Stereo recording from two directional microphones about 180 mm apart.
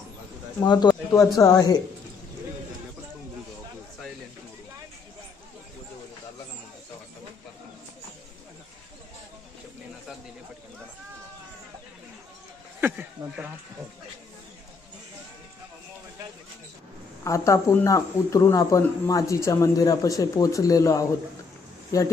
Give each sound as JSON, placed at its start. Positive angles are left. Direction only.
{"t": 0.6, "sound": "speech", "side_deg": 25}
{"t": 12.8, "sound": "speech", "side_deg": -10}
{"t": 17.2, "sound": "speech", "side_deg": 15}